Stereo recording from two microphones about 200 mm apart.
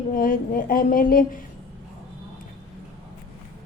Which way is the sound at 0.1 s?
45° left (ahead or behind).